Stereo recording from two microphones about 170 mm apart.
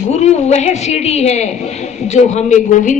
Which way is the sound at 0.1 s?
40° left (ahead or behind).